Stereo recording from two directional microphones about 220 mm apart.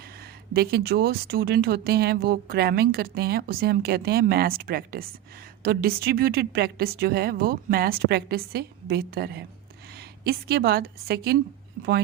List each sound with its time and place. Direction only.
0.5 s speech: 45° right (ahead or behind)